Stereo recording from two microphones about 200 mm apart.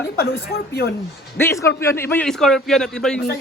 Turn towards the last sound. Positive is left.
turn(degrees=5)  # may be behind; listen again after turning